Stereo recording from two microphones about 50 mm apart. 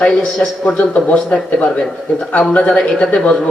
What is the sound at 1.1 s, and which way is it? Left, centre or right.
A man's voice, centre.